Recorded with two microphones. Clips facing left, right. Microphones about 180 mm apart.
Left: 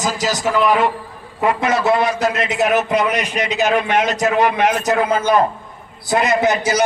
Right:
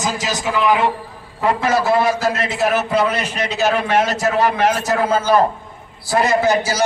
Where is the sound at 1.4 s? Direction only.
20° left (ahead or behind).